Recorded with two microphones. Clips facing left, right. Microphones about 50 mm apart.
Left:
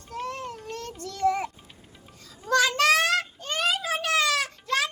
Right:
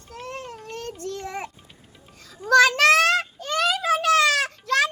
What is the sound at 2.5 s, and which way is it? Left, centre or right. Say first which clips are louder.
Child singing: right 5 dB; right.